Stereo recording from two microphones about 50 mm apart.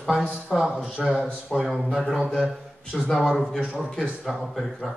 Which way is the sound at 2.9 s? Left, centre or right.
Centre.